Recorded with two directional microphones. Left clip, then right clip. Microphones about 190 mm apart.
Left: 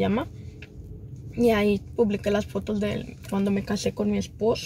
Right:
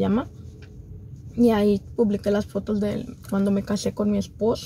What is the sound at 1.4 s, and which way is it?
Speech, 5° left (ahead or behind).